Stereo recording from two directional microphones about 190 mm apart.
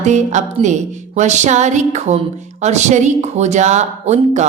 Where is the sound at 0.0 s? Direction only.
40° right (ahead or behind).